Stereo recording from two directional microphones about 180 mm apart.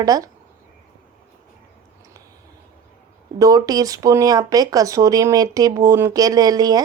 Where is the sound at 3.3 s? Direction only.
20° right (ahead or behind).